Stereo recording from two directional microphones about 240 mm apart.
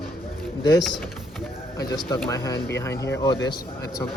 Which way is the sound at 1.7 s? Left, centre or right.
Centre.